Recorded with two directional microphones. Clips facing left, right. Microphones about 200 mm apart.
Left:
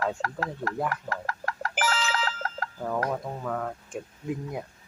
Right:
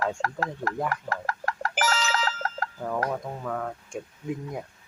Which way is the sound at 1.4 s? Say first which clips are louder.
Right 1 dB; 40° right (ahead or behind).